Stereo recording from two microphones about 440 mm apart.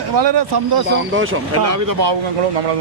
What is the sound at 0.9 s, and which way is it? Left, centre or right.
Speech, right.